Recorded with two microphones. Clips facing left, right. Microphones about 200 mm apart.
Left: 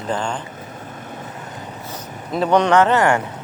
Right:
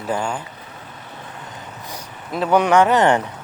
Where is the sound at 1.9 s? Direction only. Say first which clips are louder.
Left 3 dB; centre (ahead or behind); by 3.2 s 20° right (ahead or behind).